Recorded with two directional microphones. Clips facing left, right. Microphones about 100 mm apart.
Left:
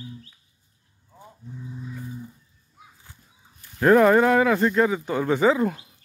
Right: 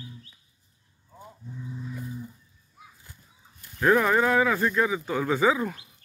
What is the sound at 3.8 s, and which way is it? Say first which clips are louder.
Speech: left 6 dB; 45° left (ahead or behind).